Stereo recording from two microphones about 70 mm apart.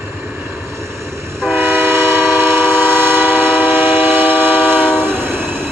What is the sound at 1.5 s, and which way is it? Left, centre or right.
Train, right.